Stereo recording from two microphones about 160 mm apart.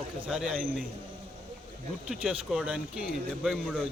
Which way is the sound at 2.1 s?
5° right (ahead or behind).